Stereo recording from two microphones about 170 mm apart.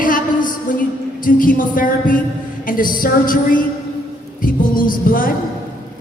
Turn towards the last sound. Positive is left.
turn(degrees=55)  # may be behind; listen again after turning